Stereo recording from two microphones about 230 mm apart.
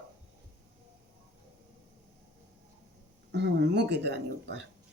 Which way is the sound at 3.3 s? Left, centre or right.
Right.